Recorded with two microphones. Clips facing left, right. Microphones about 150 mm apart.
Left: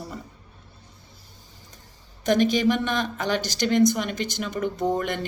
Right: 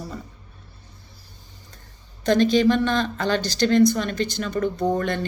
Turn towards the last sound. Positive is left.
turn(degrees=15)  # may be behind; listen again after turning